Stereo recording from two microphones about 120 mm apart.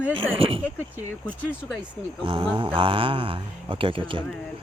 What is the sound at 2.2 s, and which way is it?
Speech, 50° right (ahead or behind).